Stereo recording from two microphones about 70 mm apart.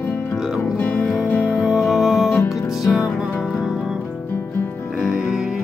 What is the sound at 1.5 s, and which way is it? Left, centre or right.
Music, centre.